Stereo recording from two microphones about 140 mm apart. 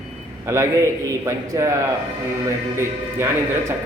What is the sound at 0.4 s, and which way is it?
Speech, 20° right (ahead or behind).